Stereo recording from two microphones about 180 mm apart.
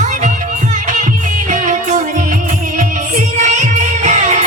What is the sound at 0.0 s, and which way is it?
Music, 45° right (ahead or behind).